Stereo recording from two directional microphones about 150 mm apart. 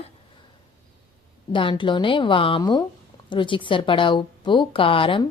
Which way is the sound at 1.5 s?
35° left (ahead or behind).